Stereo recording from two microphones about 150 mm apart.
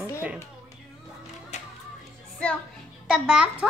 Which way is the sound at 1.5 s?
50° left (ahead or behind).